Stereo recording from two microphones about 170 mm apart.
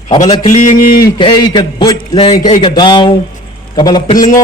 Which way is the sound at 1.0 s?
25° left (ahead or behind).